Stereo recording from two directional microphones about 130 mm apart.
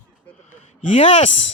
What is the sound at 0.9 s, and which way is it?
Female singing, 50° left (ahead or behind).